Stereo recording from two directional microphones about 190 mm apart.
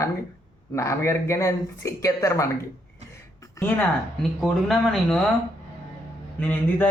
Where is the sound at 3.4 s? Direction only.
10° left (ahead or behind).